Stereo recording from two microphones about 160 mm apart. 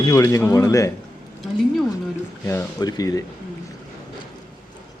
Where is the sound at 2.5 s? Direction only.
20° left (ahead or behind).